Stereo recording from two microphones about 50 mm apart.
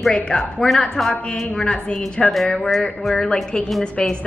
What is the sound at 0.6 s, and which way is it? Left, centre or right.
Speech, centre.